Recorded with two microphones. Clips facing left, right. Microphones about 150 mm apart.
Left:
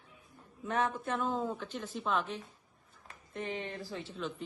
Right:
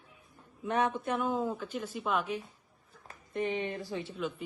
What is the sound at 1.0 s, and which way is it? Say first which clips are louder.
A woman's voice: right 2 dB; 10° right (ahead or behind).